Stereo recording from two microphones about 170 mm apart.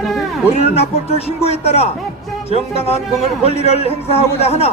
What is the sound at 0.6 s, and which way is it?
A man's voice, 35° left (ahead or behind).